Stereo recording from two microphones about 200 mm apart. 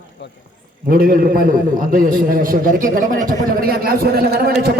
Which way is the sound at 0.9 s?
45° right (ahead or behind).